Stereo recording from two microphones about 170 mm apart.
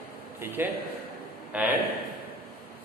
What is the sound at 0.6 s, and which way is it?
A man's voice, 15° right (ahead or behind).